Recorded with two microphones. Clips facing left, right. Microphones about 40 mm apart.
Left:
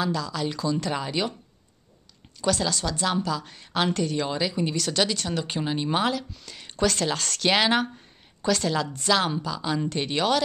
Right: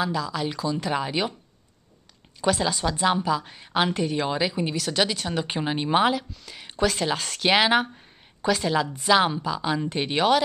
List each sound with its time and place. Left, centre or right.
0.0 s a woman's voice: centre
2.4 s a woman's voice: centre